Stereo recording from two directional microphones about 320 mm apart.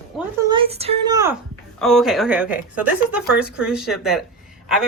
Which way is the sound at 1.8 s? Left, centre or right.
Centre.